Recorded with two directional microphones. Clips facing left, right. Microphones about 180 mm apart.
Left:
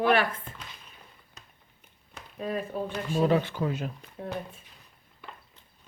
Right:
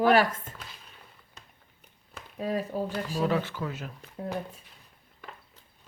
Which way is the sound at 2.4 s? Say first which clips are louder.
Right 2 dB; 35° right (ahead or behind).